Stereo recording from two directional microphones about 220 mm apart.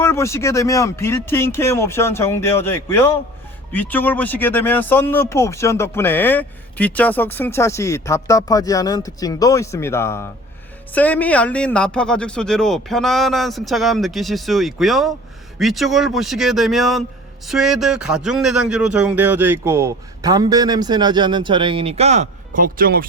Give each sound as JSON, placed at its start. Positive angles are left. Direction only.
{"t": 0.0, "sound": "a man's voice", "side_deg": 10}